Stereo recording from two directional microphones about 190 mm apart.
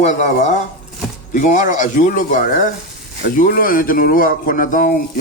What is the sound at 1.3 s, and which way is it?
A man's voice, 40° left (ahead or behind).